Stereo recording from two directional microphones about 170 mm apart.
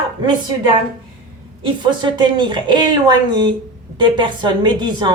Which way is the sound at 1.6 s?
30° right (ahead or behind).